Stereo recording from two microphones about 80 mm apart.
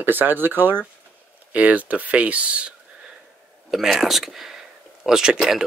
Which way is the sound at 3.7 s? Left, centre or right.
Centre.